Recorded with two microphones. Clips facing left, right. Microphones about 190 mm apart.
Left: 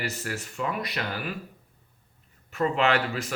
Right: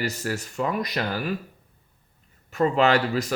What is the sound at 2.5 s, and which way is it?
Speech, 40° right (ahead or behind).